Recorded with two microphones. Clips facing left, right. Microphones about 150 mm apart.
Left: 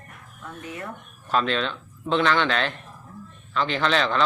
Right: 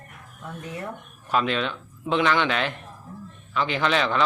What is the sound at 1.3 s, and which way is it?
Speech, 10° right (ahead or behind).